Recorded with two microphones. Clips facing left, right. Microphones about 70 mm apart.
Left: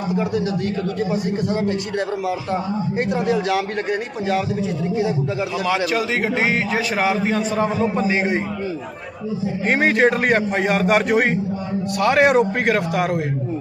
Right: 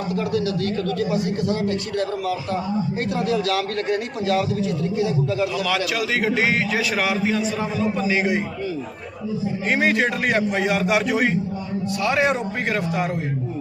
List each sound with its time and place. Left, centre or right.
0.9 s a man's voice: left
3.8 s a man's voice: centre
4.9 s a man's voice: left
7.6 s a man's voice: left
9.6 s a man's voice: left
11.9 s a man's voice: left